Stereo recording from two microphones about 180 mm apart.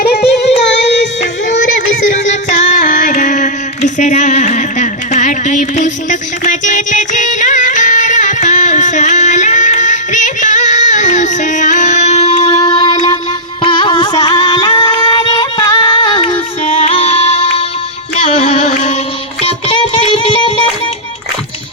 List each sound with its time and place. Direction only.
0.0 s music: 60° left (ahead or behind)
0.7 s music: 80° left
1.2 s music: 45° left (ahead or behind); by 20.5 s 30° left (ahead or behind)